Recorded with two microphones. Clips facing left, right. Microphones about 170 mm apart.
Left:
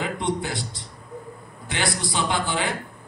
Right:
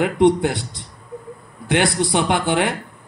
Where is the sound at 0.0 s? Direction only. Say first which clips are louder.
Right 11 dB; 60° right (ahead or behind).